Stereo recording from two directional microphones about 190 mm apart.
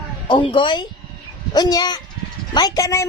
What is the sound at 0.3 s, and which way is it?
A woman's voice, 25° left (ahead or behind).